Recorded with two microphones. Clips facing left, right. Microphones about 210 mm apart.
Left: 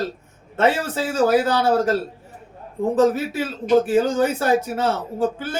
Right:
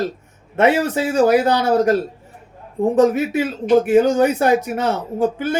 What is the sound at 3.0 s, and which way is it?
Speech, 15° right (ahead or behind).